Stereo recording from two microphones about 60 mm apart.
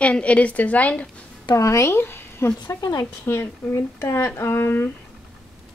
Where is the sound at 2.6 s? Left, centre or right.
Left.